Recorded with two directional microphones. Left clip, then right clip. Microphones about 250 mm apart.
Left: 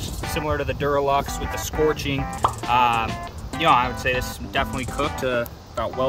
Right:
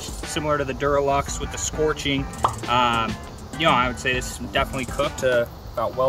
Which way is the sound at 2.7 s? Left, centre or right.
Left.